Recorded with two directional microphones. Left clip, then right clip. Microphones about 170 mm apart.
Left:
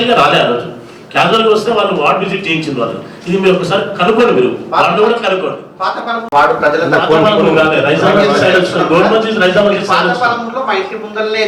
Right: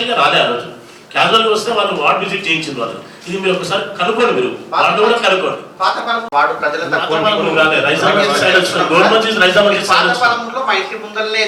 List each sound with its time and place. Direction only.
0.0 s a man's voice: 10° left (ahead or behind)
6.6 s a man's voice: 10° left (ahead or behind)